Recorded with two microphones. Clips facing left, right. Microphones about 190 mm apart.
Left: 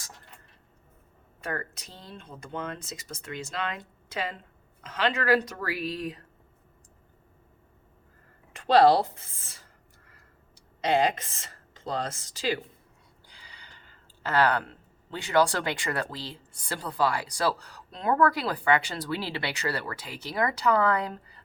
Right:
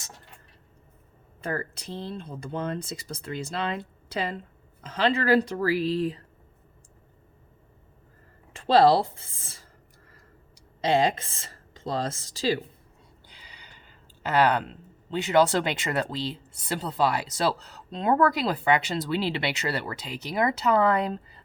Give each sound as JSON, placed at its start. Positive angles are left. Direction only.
{"t": 1.4, "sound": "speech", "side_deg": -30}
{"t": 8.5, "sound": "speech", "side_deg": -30}
{"t": 10.8, "sound": "speech", "side_deg": -30}
{"t": 13.2, "sound": "speech", "side_deg": -20}